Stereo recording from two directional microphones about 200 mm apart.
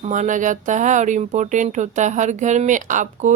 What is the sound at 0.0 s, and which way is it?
Speech, 40° right (ahead or behind).